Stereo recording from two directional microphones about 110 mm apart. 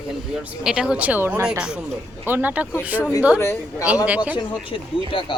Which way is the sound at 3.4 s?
25° left (ahead or behind).